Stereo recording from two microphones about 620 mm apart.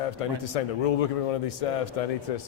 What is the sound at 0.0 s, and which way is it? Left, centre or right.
A man's voice, left.